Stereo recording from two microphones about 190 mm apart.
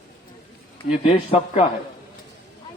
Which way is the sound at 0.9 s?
35° left (ahead or behind).